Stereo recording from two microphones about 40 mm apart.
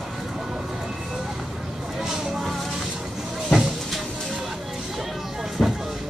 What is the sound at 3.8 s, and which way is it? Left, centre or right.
Music, centre.